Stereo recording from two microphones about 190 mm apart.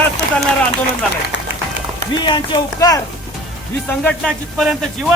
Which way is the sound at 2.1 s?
25° left (ahead or behind).